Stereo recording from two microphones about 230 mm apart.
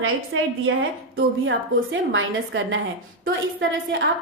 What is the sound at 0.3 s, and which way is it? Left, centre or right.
A woman's voice, right.